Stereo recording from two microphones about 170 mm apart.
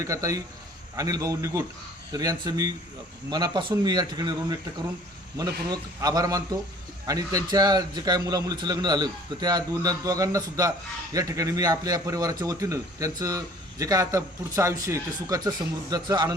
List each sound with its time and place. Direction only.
0.0 s a man's voice: 20° right (ahead or behind)